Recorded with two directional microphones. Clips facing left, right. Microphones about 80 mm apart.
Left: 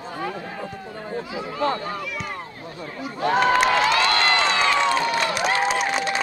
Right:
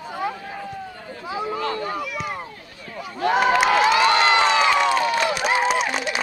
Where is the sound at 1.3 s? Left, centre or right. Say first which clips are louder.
Right 4 dB; right.